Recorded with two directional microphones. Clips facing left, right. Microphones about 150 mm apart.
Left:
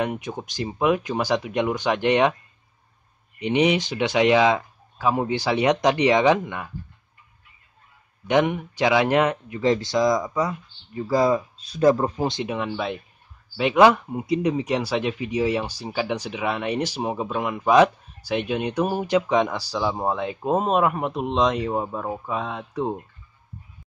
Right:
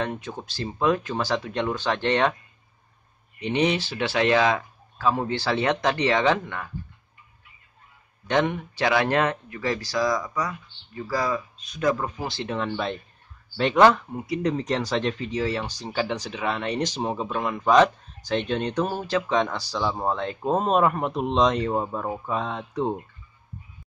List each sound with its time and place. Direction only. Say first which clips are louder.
0.0 s speech: left 3 dB; 15° left (ahead or behind)
3.3 s speech: left 3 dB; 15° left (ahead or behind)
8.3 s speech: left 3 dB; 15° left (ahead or behind); by 12.3 s 35° left (ahead or behind)
12.3 s speech: left 2 dB; 15° left (ahead or behind)